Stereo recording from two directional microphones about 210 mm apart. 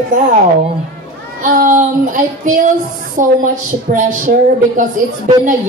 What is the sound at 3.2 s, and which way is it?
Speech, 40° right (ahead or behind).